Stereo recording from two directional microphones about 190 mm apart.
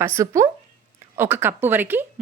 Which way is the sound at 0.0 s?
15° right (ahead or behind).